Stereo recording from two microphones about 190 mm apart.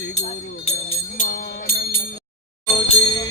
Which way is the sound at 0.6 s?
35° left (ahead or behind).